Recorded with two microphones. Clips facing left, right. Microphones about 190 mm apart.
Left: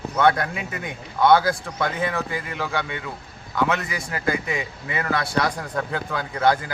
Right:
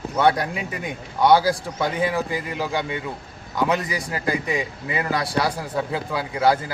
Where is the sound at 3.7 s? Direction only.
35° right (ahead or behind).